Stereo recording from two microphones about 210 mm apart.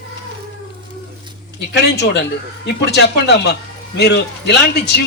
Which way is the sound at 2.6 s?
55° left (ahead or behind).